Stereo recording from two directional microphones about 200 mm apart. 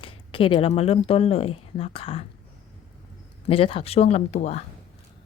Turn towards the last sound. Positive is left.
turn(degrees=35)  # may be behind; listen again after turning